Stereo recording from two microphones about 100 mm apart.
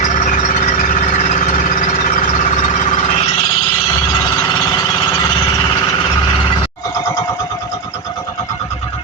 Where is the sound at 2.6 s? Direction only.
90° left.